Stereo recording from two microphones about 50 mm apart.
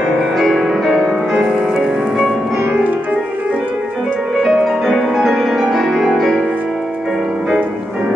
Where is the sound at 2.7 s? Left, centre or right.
Right.